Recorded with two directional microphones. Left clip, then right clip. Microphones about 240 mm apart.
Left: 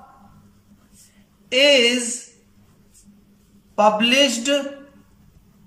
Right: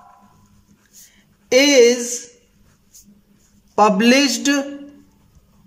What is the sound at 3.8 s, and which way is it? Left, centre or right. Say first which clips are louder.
Speech: right 2 dB; right.